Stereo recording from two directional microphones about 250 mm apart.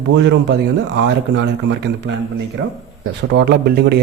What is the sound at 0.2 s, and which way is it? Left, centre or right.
Speech, right.